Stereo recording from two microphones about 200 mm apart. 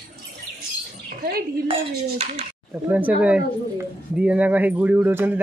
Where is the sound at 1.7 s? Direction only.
30° right (ahead or behind).